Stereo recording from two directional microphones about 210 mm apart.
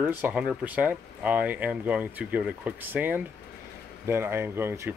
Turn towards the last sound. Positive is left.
turn(degrees=-10)  # may be behind; listen again after turning